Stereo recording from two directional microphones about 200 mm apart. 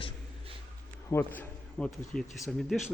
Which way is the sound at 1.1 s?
10° left (ahead or behind).